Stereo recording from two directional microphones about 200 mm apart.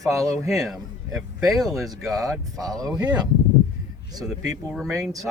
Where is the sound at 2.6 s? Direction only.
15° right (ahead or behind).